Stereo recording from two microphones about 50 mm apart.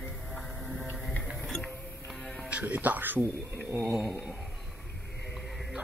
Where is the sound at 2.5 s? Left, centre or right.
Right.